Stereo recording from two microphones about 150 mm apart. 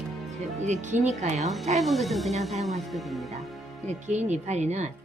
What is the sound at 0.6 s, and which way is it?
Speech, 50° right (ahead or behind).